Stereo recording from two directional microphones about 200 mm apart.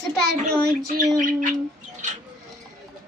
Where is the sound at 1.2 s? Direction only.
40° right (ahead or behind).